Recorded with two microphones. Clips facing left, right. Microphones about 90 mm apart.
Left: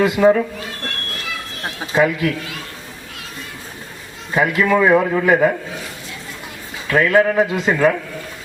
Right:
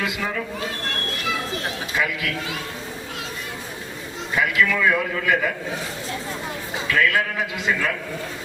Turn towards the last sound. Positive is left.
turn(degrees=35)  # may be behind; listen again after turning